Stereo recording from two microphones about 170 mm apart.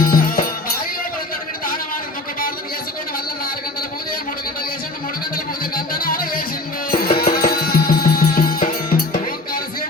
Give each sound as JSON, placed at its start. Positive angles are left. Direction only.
{"t": 0.1, "sound": "music", "side_deg": 55}
{"t": 5.7, "sound": "music", "side_deg": 60}